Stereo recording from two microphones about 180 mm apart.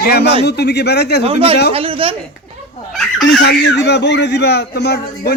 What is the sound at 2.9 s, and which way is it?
Fowl, centre (ahead or behind).